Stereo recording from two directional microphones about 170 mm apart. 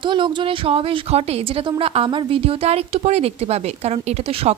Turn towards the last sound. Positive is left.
turn(degrees=-40)  # may be behind; listen again after turning